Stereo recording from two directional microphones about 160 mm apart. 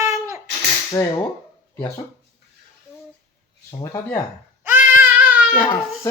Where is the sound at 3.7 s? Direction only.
20° left (ahead or behind).